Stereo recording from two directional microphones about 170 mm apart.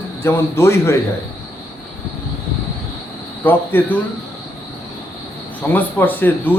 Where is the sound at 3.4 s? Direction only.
10° left (ahead or behind).